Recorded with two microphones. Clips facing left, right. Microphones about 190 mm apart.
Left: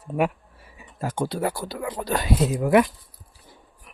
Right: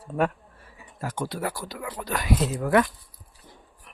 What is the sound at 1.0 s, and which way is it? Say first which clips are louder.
Speech: left 4 dB; 25° left (ahead or behind).